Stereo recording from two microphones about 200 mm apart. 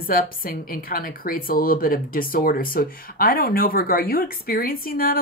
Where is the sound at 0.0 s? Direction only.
45° left (ahead or behind).